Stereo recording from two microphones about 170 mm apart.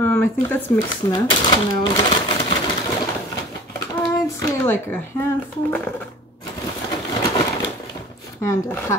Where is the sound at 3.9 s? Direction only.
20° left (ahead or behind).